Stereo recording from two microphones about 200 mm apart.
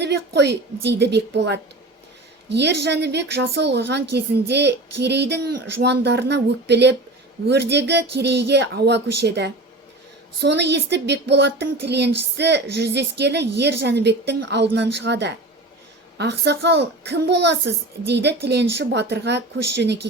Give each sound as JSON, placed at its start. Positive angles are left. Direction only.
{"t": 0.0, "sound": "speech", "side_deg": -60}